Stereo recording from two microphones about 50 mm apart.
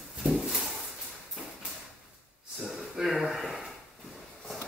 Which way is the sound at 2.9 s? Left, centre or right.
Centre.